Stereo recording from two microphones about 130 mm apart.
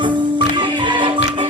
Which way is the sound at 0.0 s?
40° right (ahead or behind).